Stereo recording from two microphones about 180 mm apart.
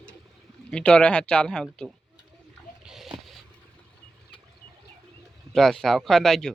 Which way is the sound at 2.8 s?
Centre (ahead or behind).